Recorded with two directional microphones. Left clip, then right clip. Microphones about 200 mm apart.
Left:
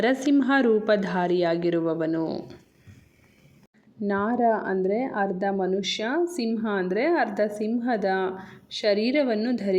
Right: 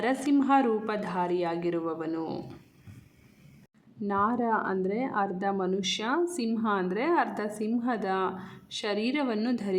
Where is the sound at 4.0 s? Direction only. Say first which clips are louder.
Left 4 dB; 15° left (ahead or behind).